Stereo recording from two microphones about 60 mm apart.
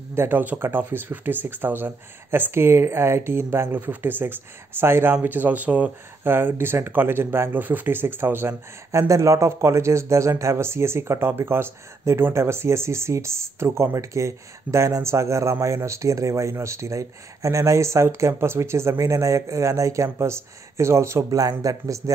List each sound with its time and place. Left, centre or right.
0.1 s speech: right
5.1 s speech: right
6.2 s speech: right
8.9 s speech: right
21.3 s speech: right